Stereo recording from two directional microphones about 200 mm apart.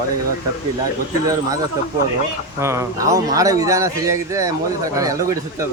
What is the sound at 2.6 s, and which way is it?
A man's voice, 15° right (ahead or behind).